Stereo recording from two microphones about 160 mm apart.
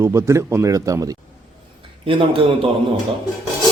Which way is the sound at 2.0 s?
35° right (ahead or behind).